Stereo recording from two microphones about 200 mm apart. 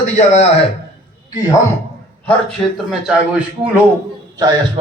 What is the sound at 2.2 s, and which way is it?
A man's voice, centre (ahead or behind).